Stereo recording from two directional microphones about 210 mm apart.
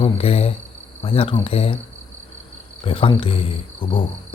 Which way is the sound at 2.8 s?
25° left (ahead or behind).